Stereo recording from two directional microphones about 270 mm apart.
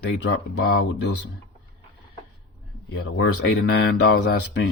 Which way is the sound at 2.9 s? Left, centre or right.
Left.